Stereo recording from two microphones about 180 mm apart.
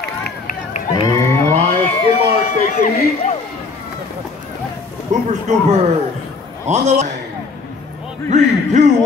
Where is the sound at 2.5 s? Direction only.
40° left (ahead or behind).